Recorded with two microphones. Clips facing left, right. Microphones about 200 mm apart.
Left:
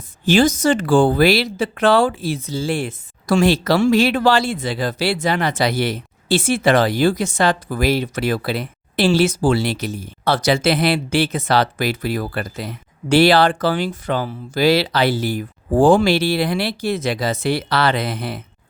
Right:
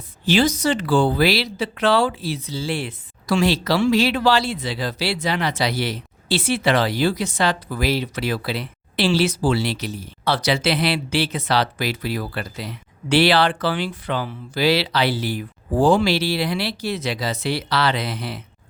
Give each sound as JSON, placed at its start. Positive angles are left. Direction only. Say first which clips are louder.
{"t": 0.3, "sound": "speech", "louder": "left 4 dB", "side_deg": 45}